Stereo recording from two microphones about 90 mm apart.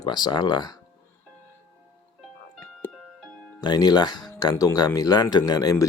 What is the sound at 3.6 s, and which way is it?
Speech, 50° left (ahead or behind).